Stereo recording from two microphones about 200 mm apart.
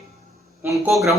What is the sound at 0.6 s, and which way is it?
Speech, 10° right (ahead or behind).